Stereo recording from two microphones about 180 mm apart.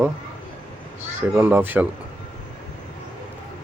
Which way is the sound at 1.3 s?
10° right (ahead or behind).